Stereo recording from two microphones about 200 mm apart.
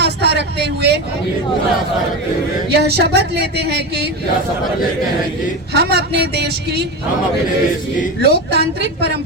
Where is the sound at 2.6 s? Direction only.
55° right (ahead or behind).